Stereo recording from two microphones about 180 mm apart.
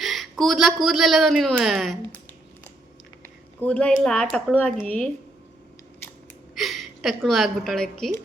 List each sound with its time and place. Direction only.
0.0 s speech: centre (ahead or behind)
3.2 s speech: 10° left (ahead or behind)
6.6 s a woman's voice: centre (ahead or behind)